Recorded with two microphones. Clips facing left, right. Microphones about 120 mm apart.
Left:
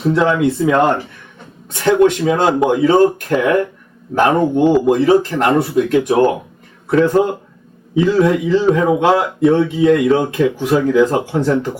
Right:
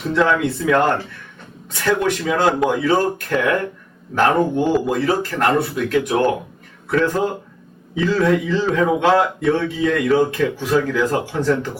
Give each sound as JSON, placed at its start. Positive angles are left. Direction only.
{"t": 0.1, "sound": "speech", "side_deg": 20}